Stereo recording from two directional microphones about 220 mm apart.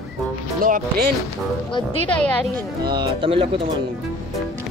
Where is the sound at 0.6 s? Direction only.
40° right (ahead or behind).